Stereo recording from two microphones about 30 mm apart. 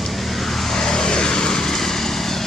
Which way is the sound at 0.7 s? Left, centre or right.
Left.